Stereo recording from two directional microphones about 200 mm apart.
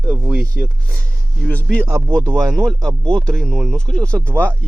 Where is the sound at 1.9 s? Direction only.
10° right (ahead or behind).